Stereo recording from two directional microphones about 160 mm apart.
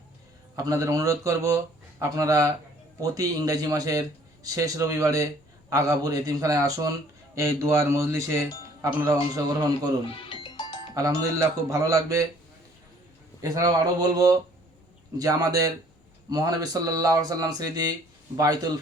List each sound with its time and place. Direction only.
0.5 s speech: 20° right (ahead or behind)
10.2 s music: 30° left (ahead or behind)
10.9 s speech: 20° right (ahead or behind)
13.4 s speech: 20° right (ahead or behind)